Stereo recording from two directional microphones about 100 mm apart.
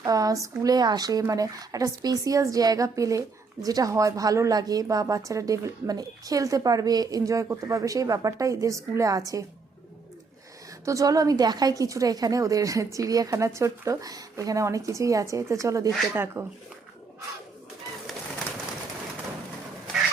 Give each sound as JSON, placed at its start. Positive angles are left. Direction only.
{"t": 0.0, "sound": "speech", "side_deg": -35}
{"t": 10.8, "sound": "speech", "side_deg": -35}
{"t": 16.1, "sound": "speech", "side_deg": -20}